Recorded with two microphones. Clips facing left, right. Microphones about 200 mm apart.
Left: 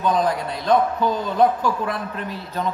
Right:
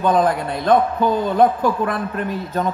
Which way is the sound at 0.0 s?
55° right (ahead or behind).